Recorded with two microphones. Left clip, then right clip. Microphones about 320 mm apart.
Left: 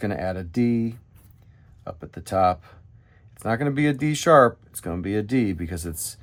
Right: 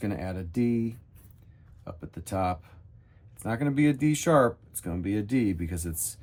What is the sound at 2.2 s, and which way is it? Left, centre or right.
Speech, centre.